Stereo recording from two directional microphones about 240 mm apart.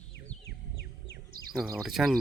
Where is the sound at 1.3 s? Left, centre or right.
Right.